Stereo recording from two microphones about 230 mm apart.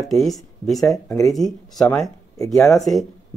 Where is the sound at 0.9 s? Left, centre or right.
Centre.